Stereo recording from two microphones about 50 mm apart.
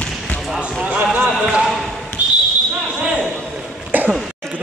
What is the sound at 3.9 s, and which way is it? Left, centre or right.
Throat clearing, right.